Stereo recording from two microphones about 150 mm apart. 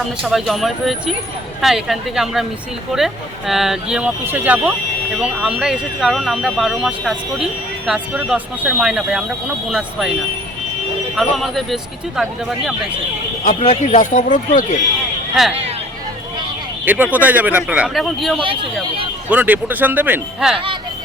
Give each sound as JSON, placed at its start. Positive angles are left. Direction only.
{"t": 0.2, "sound": "speech", "side_deg": 0}
{"t": 11.1, "sound": "speech", "side_deg": 0}
{"t": 13.4, "sound": "speech", "side_deg": 50}
{"t": 15.4, "sound": "speech", "side_deg": -5}
{"t": 16.8, "sound": "speech", "side_deg": -10}
{"t": 18.3, "sound": "speech", "side_deg": -35}
{"t": 19.3, "sound": "speech", "side_deg": -10}